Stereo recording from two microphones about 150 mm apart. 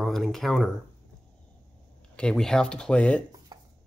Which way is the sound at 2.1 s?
5° left (ahead or behind).